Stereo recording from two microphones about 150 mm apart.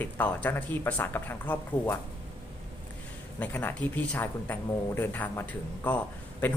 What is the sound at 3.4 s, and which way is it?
Speech, 10° left (ahead or behind).